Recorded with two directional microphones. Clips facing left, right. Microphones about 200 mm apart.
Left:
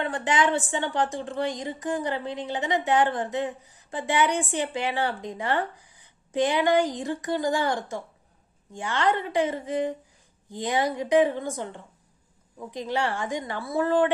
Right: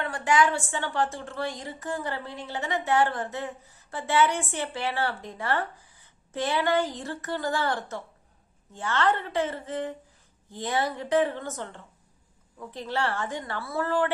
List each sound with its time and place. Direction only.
0.0 s a woman's voice: 20° left (ahead or behind)